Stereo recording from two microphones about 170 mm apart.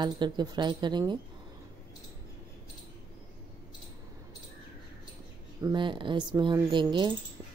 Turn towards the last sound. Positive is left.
turn(degrees=-25)  # may be behind; listen again after turning